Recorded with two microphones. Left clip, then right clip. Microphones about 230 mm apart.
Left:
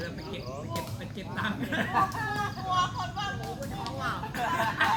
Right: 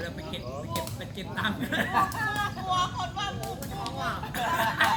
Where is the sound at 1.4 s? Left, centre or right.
Right.